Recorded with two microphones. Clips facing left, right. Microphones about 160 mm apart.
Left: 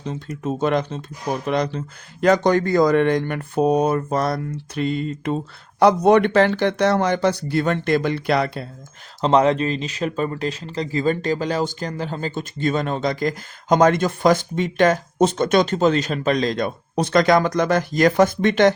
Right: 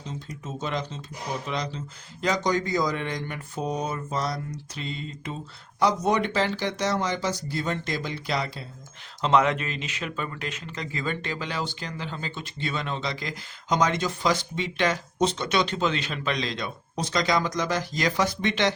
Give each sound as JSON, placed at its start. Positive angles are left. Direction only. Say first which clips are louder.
{"t": 0.4, "sound": "speech", "louder": "left 11 dB", "side_deg": 60}
{"t": 9.2, "sound": "speech", "louder": "left 6 dB", "side_deg": 35}